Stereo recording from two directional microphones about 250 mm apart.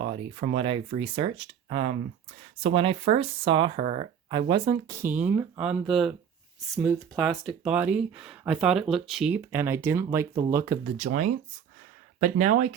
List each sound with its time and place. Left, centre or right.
0.0 s speech: right
10.9 s speech: right